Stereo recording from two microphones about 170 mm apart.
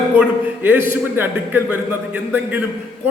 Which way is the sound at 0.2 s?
10° right (ahead or behind).